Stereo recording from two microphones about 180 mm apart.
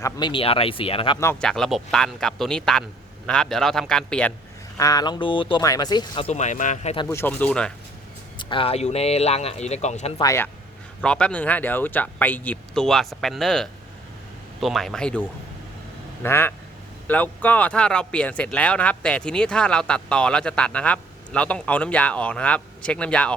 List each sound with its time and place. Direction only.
0.0 s speech: 25° left (ahead or behind)
1.2 s speech: 10° left (ahead or behind)
4.8 s speech: 20° left (ahead or behind); by 6.9 s 45° left (ahead or behind)
6.9 s speech: 25° left (ahead or behind)
7.2 s speech: 10° left (ahead or behind)
8.4 s speech: 30° left (ahead or behind)
10.2 s speech: 15° left (ahead or behind)
11.0 s speech: 5° left (ahead or behind)
16.2 s speech: 10° left (ahead or behind)